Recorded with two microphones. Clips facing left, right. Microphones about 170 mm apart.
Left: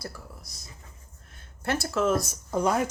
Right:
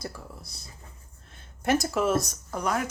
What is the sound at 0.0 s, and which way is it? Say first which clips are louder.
Speech: right 2 dB; 30° right (ahead or behind).